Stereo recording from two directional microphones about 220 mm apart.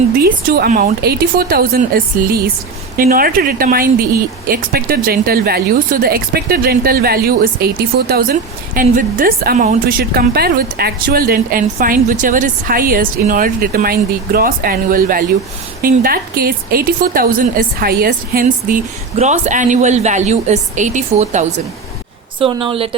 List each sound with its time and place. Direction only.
0.2 s a woman's voice: 40° right (ahead or behind); by 23.0 s 25° right (ahead or behind)